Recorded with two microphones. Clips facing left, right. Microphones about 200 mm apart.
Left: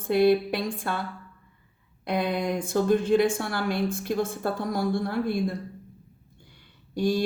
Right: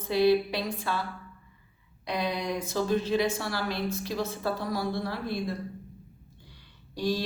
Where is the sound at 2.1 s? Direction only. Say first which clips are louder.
Left 4 dB; 55° left (ahead or behind).